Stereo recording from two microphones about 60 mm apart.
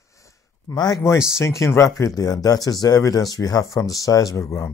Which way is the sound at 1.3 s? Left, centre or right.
Left.